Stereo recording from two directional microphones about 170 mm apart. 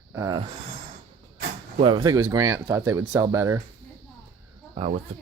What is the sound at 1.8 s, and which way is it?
Speech, 25° right (ahead or behind).